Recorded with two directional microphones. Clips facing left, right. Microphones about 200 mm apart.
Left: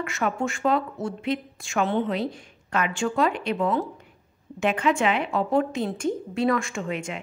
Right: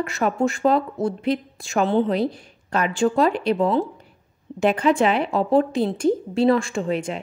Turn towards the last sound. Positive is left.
turn(degrees=-35)  # may be behind; listen again after turning